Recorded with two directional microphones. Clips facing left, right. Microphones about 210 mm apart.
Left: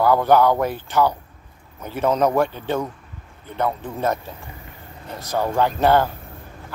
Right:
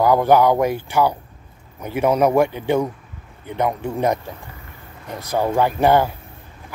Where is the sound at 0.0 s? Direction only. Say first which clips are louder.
Right 1 dB; 15° right (ahead or behind).